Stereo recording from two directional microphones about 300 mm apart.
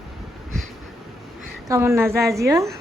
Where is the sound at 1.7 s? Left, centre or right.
Centre.